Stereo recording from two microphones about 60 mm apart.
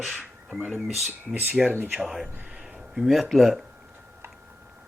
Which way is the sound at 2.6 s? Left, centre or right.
Centre.